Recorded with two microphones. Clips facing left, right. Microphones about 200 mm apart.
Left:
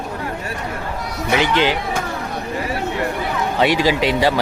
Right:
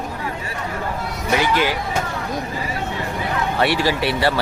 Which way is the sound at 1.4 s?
20° left (ahead or behind).